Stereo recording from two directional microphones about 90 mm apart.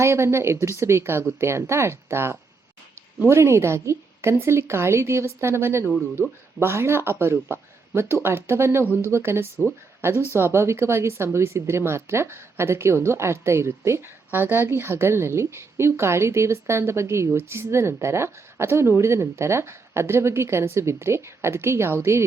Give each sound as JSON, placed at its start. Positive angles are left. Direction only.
{"t": 0.0, "sound": "speech", "side_deg": -30}